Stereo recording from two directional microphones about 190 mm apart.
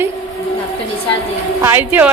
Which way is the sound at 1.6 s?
10° right (ahead or behind).